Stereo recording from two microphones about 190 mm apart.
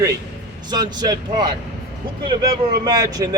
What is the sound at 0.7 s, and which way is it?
A man's voice, 20° right (ahead or behind).